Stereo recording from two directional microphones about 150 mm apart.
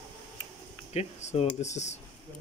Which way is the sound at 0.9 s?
45° left (ahead or behind).